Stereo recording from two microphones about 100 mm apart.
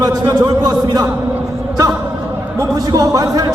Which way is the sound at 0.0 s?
40° right (ahead or behind).